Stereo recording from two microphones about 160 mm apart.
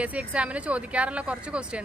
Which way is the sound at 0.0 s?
10° right (ahead or behind).